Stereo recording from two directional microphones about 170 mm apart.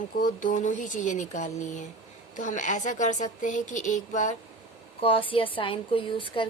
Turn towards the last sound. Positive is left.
turn(degrees=30)  # may be behind; listen again after turning